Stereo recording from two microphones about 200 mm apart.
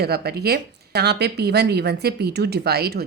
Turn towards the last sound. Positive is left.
turn(degrees=-50)  # may be behind; listen again after turning